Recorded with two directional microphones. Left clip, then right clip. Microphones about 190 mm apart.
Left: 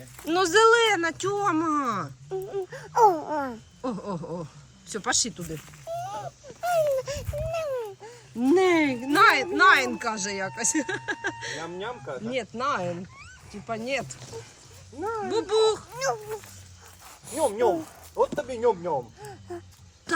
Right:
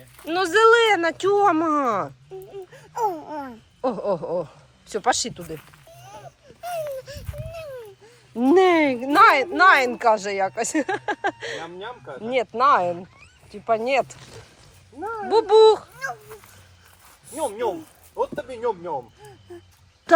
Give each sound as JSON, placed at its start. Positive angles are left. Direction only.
{"t": 0.2, "sound": "speech", "side_deg": 0}
{"t": 2.5, "sound": "speech", "side_deg": 5}
{"t": 6.1, "sound": "a sound", "side_deg": 15}
{"t": 8.4, "sound": "speech", "side_deg": -10}
{"t": 11.7, "sound": "speech", "side_deg": -25}
{"t": 15.3, "sound": "speech", "side_deg": -10}
{"t": 17.3, "sound": "speech", "side_deg": -30}
{"t": 20.1, "sound": "a sound", "side_deg": -15}